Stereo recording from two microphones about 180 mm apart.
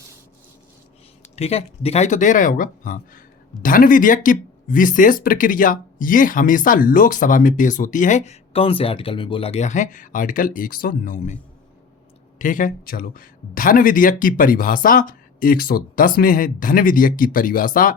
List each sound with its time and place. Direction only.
1.2 s speech: 35° left (ahead or behind)
12.4 s speech: 45° left (ahead or behind)